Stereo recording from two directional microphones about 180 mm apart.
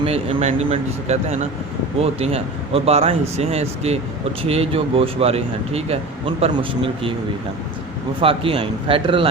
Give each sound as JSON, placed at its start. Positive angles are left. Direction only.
{"t": 0.0, "sound": "speech", "side_deg": -35}
{"t": 8.2, "sound": "speech", "side_deg": -30}